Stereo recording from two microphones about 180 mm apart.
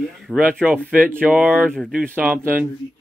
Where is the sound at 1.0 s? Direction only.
10° right (ahead or behind).